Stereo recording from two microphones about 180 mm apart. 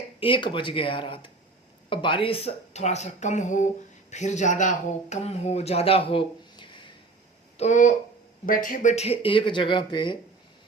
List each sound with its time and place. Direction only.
0.2 s a woman's voice: 30° left (ahead or behind)
7.5 s speech: 40° left (ahead or behind)